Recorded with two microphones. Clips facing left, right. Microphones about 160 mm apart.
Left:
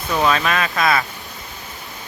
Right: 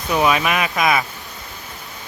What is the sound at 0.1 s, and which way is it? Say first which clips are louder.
Speech: right 1 dB; 15° right (ahead or behind).